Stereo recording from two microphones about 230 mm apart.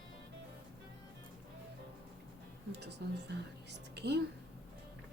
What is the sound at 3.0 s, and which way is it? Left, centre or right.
Speech, right.